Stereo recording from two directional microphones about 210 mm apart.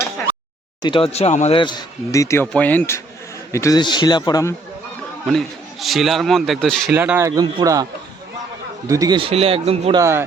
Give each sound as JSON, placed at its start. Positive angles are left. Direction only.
{"t": 0.8, "sound": "speech", "side_deg": 25}
{"t": 5.3, "sound": "speech", "side_deg": 0}
{"t": 6.9, "sound": "speech", "side_deg": -10}
{"t": 8.9, "sound": "speech", "side_deg": -15}
{"t": 10.0, "sound": "speech", "side_deg": -10}